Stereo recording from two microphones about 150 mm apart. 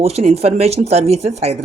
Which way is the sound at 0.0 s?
45° right (ahead or behind).